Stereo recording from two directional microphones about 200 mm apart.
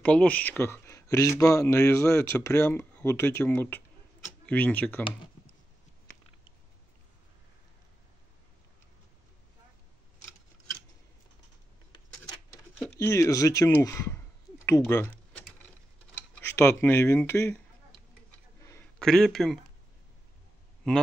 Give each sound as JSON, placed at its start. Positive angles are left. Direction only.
{"t": 0.0, "sound": "speech", "side_deg": 5}
{"t": 12.7, "sound": "speech", "side_deg": 10}
{"t": 15.0, "sound": "typing", "side_deg": 5}
{"t": 16.2, "sound": "speech", "side_deg": 10}
{"t": 18.6, "sound": "a sound", "side_deg": 15}
{"t": 18.9, "sound": "speech", "side_deg": 0}